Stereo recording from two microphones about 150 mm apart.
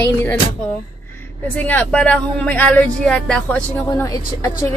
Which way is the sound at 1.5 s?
10° left (ahead or behind).